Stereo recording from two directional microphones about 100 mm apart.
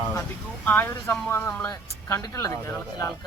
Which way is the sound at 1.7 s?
35° left (ahead or behind).